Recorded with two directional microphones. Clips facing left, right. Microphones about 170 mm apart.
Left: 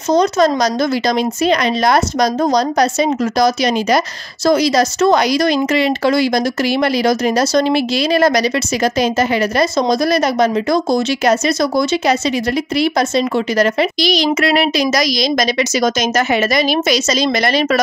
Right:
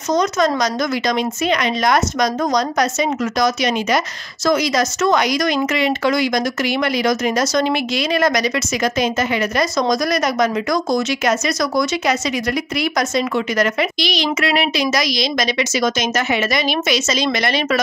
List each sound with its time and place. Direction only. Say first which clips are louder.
0.1 s speech: left 4 dB; 30° left (ahead or behind)